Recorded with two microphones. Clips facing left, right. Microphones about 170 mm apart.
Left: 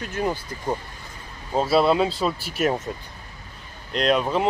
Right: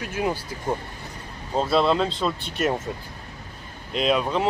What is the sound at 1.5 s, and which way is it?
Speech, 5° left (ahead or behind).